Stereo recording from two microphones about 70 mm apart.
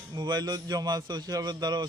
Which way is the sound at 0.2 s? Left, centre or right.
Right.